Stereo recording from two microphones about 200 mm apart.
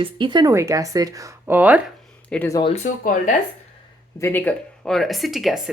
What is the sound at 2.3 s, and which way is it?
Speech, 10° left (ahead or behind).